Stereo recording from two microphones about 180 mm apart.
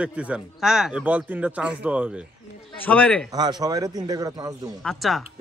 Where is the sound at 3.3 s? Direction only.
20° right (ahead or behind).